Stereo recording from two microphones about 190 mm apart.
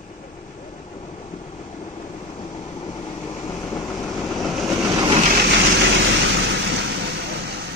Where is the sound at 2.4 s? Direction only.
25° left (ahead or behind).